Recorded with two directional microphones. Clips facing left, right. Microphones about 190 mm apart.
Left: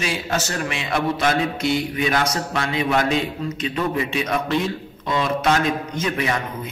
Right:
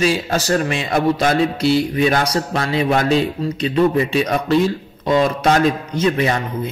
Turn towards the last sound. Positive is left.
turn(degrees=-30)  # may be behind; listen again after turning